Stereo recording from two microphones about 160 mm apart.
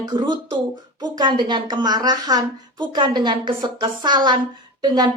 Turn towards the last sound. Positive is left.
turn(degrees=-25)  # may be behind; listen again after turning